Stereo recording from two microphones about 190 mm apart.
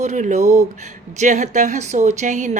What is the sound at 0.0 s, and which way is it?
A woman's voice, 40° right (ahead or behind).